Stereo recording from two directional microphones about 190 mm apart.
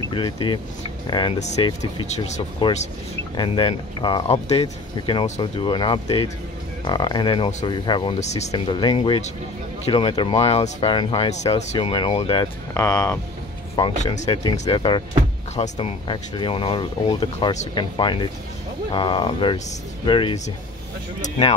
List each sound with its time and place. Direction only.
0.1 s speech: 25° left (ahead or behind)
2.1 s speech: 35° left (ahead or behind)
3.3 s speech: 25° left (ahead or behind)
12.4 s speech: 15° left (ahead or behind)
13.9 s speech: 35° left (ahead or behind)
14.3 s speech: 15° left (ahead or behind)